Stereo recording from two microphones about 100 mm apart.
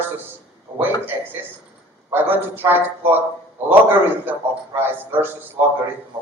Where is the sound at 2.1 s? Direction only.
20° right (ahead or behind).